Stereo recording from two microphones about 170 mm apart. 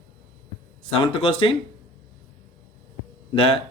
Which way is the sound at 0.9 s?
30° left (ahead or behind).